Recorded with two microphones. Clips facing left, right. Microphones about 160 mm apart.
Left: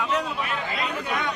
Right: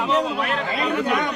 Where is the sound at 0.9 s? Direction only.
75° right (ahead or behind).